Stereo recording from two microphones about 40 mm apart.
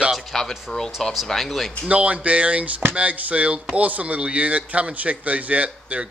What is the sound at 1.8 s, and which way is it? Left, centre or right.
Speech, right.